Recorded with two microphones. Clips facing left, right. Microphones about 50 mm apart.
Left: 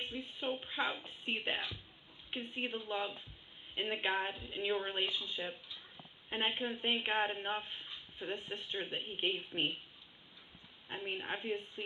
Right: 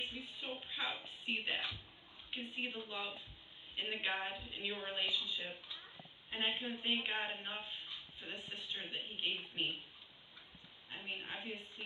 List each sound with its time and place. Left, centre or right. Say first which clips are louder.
0.0 s music: left 5 dB; left
2.3 s a woman's voice: left 3 dB; left
11.1 s speech: left 6 dB; left